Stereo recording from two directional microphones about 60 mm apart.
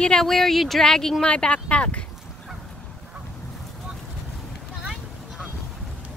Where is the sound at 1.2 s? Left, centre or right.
Centre.